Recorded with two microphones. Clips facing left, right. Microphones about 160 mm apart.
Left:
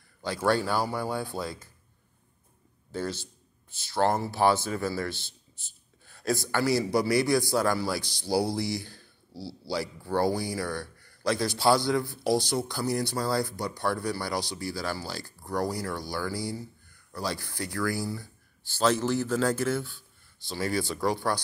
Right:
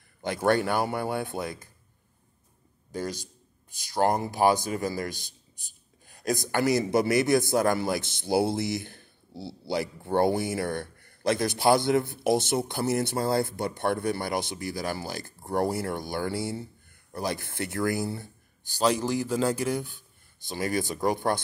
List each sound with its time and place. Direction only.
0.2 s a man's voice: 20° right (ahead or behind)
0.7 s speech: 55° right (ahead or behind)
1.2 s a man's voice: 20° right (ahead or behind)
2.9 s a man's voice: 15° right (ahead or behind)
10.8 s a sound: 55° right (ahead or behind)
11.2 s a man's voice: 20° right (ahead or behind)
17.1 s a man's voice: 20° right (ahead or behind)
18.8 s a man's voice: 10° right (ahead or behind)